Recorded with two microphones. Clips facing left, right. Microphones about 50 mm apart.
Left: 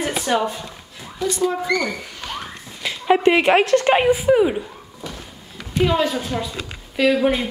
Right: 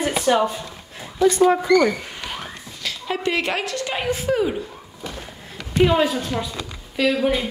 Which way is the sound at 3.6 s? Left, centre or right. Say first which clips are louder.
Left 10 dB; left.